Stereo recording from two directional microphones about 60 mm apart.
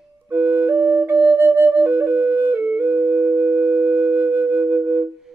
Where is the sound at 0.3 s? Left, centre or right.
Right.